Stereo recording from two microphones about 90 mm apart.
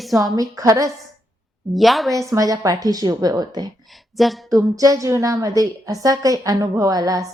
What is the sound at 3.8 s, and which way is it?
Speech, centre (ahead or behind).